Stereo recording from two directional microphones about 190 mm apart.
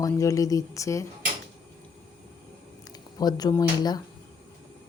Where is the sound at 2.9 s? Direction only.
20° left (ahead or behind).